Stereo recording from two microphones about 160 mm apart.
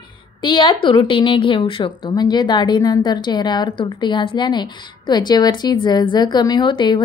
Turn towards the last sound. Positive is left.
turn(degrees=30)  # may be behind; listen again after turning